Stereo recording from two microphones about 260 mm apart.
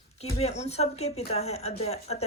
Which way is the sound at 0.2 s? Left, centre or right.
Left.